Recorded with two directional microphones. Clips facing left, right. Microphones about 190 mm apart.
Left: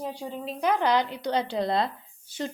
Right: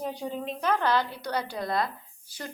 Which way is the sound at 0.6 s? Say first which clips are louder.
Left 2 dB; 15° left (ahead or behind).